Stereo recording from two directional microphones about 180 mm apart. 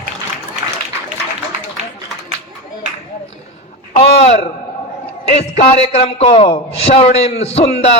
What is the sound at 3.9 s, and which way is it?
A man's voice, 35° left (ahead or behind).